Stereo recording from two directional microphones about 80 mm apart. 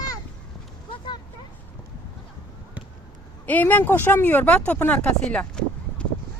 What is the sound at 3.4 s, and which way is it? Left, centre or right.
Speech, left.